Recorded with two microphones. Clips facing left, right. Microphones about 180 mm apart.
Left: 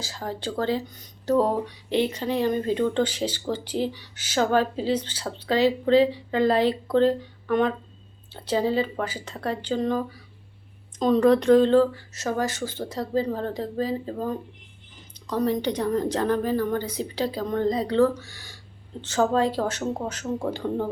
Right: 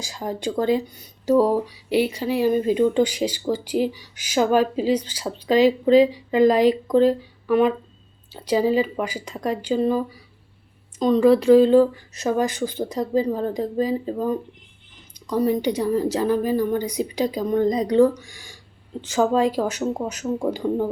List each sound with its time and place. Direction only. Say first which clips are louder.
0.0 s speech: right 4 dB; 15° right (ahead or behind)
11.0 s speech: right 3 dB; centre (ahead or behind)